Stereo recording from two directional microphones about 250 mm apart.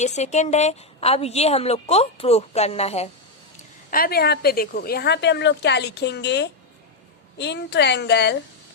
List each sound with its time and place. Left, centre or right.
0.0 s a woman's voice: left
3.9 s a woman's voice: left